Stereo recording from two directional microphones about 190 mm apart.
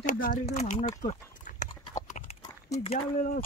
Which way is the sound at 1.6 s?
40° left (ahead or behind).